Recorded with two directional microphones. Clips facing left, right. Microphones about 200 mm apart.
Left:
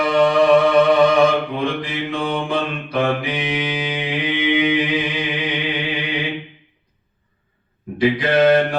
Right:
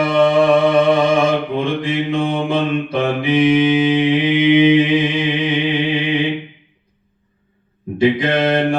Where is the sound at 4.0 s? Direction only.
25° right (ahead or behind).